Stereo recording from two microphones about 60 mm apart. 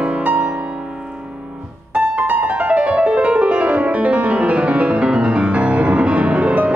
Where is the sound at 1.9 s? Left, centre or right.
Right.